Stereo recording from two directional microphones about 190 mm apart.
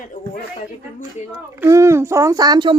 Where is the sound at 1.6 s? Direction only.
15° right (ahead or behind).